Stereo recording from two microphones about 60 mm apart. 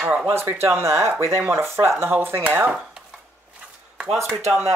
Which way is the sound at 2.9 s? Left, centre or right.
Centre.